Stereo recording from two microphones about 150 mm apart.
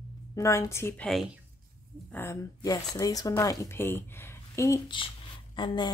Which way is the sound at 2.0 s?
15° left (ahead or behind).